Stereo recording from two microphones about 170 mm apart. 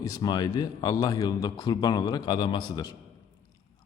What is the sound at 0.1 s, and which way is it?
A man's voice, 25° left (ahead or behind).